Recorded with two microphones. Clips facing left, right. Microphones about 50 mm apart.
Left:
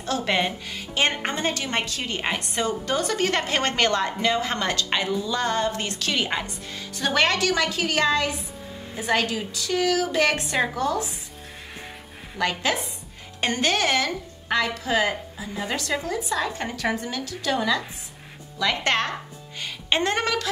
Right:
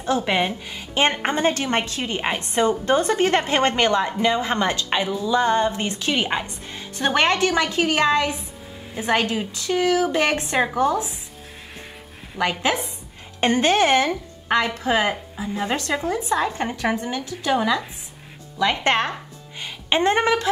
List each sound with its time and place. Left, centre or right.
0.0 s speech: centre
1.0 s a woman's voice: right
12.4 s speech: centre
13.4 s a woman's voice: right
19.6 s a sound: centre